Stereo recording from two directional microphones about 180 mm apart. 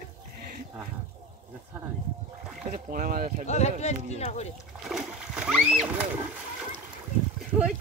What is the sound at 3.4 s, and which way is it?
Speech, 40° left (ahead or behind).